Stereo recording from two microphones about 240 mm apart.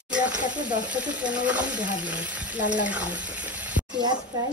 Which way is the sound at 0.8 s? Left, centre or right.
Centre.